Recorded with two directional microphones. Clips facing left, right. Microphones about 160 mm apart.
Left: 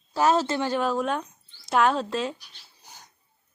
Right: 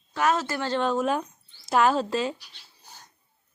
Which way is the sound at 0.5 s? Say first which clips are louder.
Even; 10° left (ahead or behind).